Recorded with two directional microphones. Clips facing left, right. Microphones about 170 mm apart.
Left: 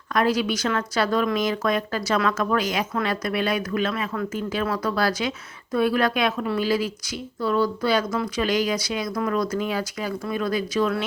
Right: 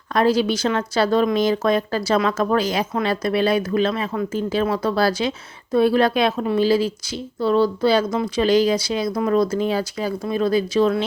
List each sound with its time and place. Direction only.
0.1 s speech: 30° right (ahead or behind)